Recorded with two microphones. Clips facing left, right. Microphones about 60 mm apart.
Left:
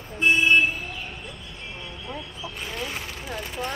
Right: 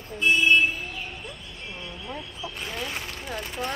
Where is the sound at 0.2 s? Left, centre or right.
Left.